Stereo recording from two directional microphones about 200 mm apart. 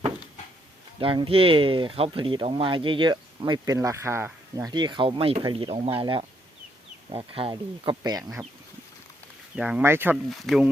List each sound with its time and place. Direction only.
0.9 s speech: 25° right (ahead or behind)
9.6 s speech: 5° right (ahead or behind)
10.2 s speech: centre (ahead or behind)